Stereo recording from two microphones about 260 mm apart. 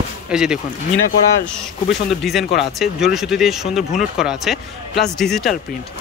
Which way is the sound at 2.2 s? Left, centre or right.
Centre.